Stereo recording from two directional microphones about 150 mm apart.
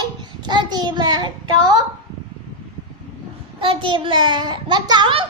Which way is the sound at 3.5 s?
35° right (ahead or behind).